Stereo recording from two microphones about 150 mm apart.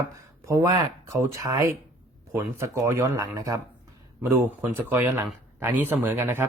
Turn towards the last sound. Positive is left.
turn(degrees=-15)  # may be behind; listen again after turning